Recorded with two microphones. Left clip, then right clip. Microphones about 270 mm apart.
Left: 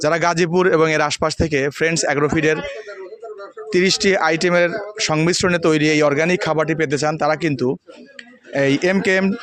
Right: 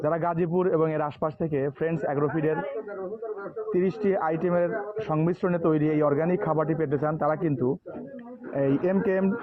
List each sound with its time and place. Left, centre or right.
0.0 s speech: left
3.7 s speech: left